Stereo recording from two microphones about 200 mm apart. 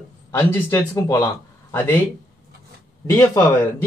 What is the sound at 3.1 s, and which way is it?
Speech, 10° left (ahead or behind).